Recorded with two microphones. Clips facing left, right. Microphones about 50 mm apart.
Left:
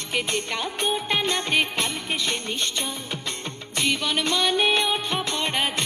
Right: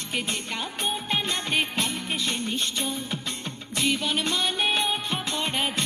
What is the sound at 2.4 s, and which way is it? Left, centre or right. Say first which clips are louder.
Music: even; left.